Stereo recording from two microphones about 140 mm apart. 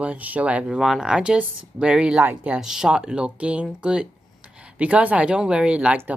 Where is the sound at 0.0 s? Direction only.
10° right (ahead or behind).